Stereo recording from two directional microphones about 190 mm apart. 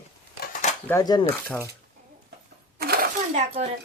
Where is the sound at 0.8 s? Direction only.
15° left (ahead or behind).